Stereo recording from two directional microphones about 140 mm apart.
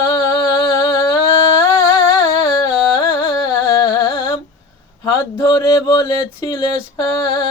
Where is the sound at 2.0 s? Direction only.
30° left (ahead or behind).